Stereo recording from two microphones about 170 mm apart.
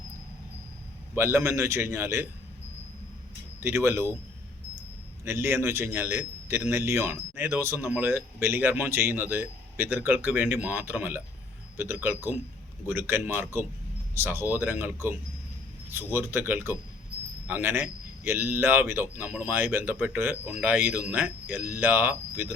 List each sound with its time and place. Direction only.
1.1 s a man's voice: 15° right (ahead or behind)
3.6 s a man's voice: 15° right (ahead or behind)
5.2 s a man's voice: 15° right (ahead or behind)